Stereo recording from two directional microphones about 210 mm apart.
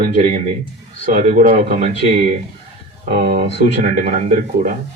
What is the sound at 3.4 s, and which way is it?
Speech, 35° right (ahead or behind).